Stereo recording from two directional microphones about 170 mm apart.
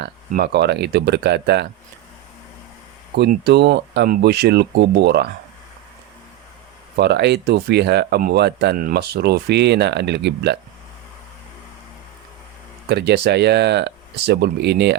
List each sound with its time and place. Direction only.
0.0 s speech: 70° right (ahead or behind)
3.2 s speech: 70° right (ahead or behind)
6.9 s speech: 75° right (ahead or behind)
12.9 s speech: 75° right (ahead or behind)